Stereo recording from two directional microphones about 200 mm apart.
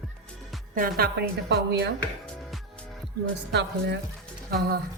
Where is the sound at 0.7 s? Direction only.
45° right (ahead or behind).